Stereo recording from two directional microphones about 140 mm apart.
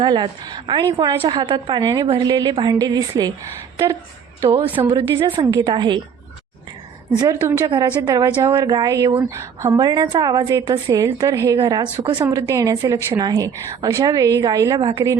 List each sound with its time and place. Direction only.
0.0 s a woman's voice: 35° right (ahead or behind)
4.7 s a woman's voice: 40° right (ahead or behind)
7.1 s a woman's voice: 25° right (ahead or behind)
11.8 s a woman's voice: 35° right (ahead or behind)